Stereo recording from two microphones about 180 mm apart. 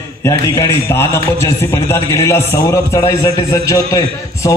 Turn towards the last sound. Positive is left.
turn(degrees=20)  # may be behind; listen again after turning